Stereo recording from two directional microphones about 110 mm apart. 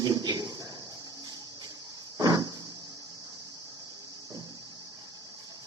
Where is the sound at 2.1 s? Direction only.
35° right (ahead or behind).